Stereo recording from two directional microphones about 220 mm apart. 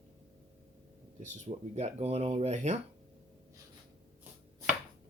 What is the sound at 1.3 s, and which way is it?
Speech, 30° right (ahead or behind).